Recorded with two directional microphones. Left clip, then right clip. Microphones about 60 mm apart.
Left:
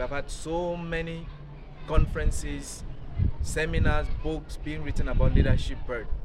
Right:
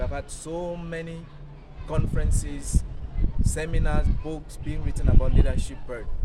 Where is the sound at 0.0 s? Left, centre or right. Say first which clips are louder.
Left 1 dB; centre.